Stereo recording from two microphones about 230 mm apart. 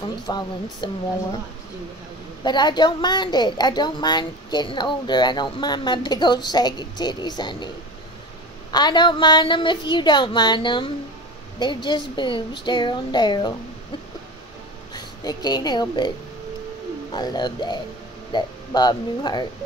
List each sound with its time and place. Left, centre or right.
0.3 s a woman's voice: centre
2.4 s a woman's voice: centre
8.7 s a woman's voice: centre
15.0 s speech: centre
17.1 s a woman's voice: centre